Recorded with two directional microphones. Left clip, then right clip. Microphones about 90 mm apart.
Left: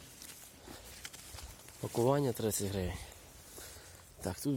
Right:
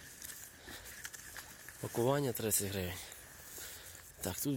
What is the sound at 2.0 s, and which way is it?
Speech, 20° left (ahead or behind).